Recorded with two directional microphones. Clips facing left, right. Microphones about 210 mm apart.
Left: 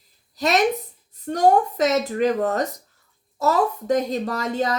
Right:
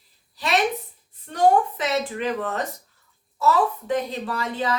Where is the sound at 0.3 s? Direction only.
45° left (ahead or behind).